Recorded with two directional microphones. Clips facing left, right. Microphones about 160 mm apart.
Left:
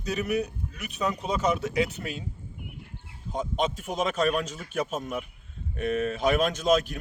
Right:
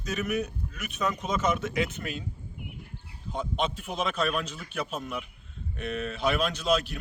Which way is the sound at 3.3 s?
40° left (ahead or behind).